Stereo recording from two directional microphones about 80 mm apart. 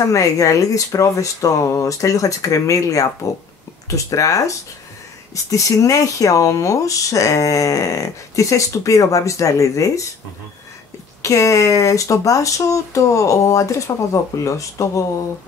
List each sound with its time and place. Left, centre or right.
0.0 s speech: left
11.2 s speech: left